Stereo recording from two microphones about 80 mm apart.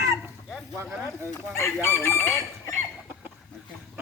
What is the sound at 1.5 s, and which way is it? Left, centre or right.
Chicken, left.